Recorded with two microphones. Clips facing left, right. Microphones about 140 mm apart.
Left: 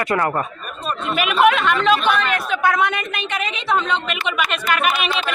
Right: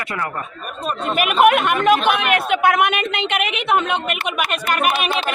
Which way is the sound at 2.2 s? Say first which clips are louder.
Right 3 dB; 20° right (ahead or behind).